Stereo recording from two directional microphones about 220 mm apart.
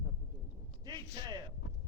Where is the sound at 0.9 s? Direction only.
20° right (ahead or behind).